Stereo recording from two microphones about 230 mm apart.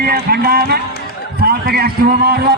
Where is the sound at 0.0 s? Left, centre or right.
Right.